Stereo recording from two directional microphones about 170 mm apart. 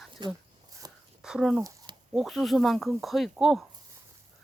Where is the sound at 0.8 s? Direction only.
20° right (ahead or behind).